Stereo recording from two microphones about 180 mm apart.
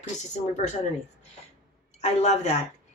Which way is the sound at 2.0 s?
35° left (ahead or behind).